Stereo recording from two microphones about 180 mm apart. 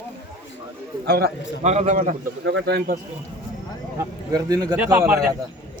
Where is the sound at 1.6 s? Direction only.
40° right (ahead or behind).